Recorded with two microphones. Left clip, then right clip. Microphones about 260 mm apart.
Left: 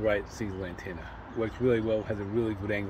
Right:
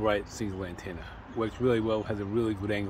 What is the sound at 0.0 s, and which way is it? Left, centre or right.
Speech, centre.